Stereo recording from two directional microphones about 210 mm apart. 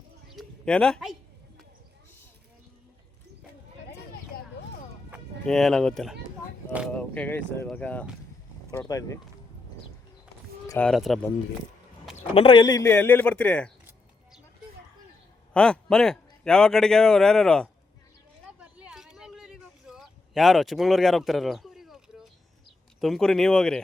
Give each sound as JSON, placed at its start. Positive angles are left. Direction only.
{"t": 0.3, "sound": "a sound", "side_deg": 5}
{"t": 5.1, "sound": "speech", "side_deg": 0}
{"t": 10.7, "sound": "a man's voice", "side_deg": 5}
{"t": 12.1, "sound": "speech", "side_deg": 25}
{"t": 12.8, "sound": "speech", "side_deg": 10}
{"t": 15.5, "sound": "a man's voice", "side_deg": 5}
{"t": 18.4, "sound": "a sound", "side_deg": -5}
{"t": 23.0, "sound": "a man's voice", "side_deg": 0}